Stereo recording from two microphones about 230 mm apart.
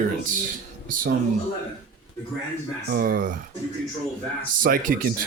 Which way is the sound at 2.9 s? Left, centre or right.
Right.